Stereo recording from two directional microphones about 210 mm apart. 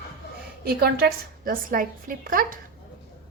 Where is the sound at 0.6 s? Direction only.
45° right (ahead or behind).